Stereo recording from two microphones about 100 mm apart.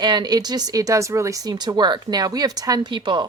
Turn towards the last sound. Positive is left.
turn(degrees=-50)  # may be behind; listen again after turning